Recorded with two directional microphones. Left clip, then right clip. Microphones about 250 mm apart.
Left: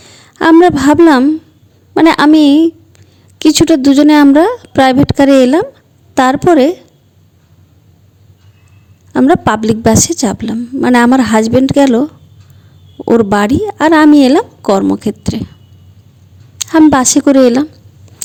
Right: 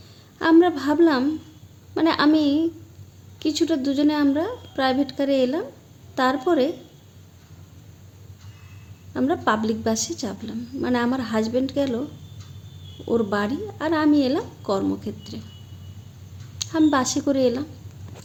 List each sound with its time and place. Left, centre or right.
0.0 s a woman's voice: left
9.1 s a woman's voice: left
13.1 s a woman's voice: left
16.6 s a woman's voice: left